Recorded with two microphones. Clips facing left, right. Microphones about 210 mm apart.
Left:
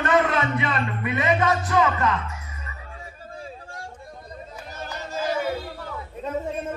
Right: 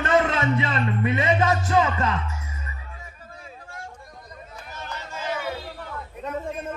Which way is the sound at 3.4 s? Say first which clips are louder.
Left 3 dB; 30° left (ahead or behind).